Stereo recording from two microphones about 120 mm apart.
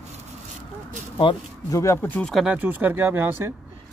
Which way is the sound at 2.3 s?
10° right (ahead or behind).